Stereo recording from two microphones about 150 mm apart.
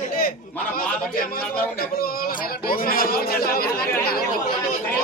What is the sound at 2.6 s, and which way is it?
A man's voice, 75° left (ahead or behind).